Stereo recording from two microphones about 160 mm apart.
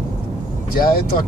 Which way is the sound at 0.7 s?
70° left (ahead or behind).